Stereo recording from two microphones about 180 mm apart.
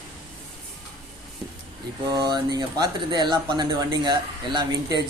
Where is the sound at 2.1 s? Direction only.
25° right (ahead or behind).